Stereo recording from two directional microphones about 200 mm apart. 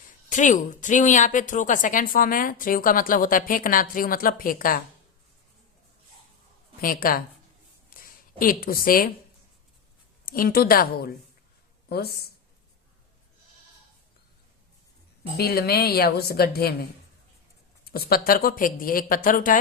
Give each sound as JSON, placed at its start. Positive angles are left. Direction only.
{"t": 0.3, "sound": "a woman's voice", "side_deg": 40}
{"t": 6.8, "sound": "a woman's voice", "side_deg": 45}
{"t": 7.9, "sound": "a sound", "side_deg": 45}
{"t": 10.2, "sound": "a woman's voice", "side_deg": 45}
{"t": 15.4, "sound": "a woman's voice", "side_deg": 50}
{"t": 17.8, "sound": "a woman's voice", "side_deg": 50}